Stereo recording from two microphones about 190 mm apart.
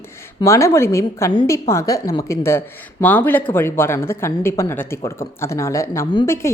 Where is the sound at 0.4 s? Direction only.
15° left (ahead or behind).